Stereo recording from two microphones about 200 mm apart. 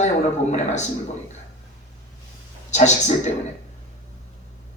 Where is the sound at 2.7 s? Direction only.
35° left (ahead or behind).